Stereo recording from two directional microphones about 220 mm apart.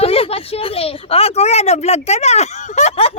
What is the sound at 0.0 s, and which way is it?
Speech, 25° left (ahead or behind).